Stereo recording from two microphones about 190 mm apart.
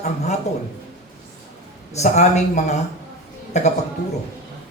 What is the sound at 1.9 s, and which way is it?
Speech, 35° left (ahead or behind).